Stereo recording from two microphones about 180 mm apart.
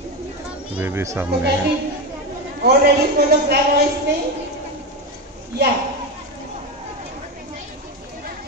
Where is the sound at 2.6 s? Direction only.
65° right (ahead or behind).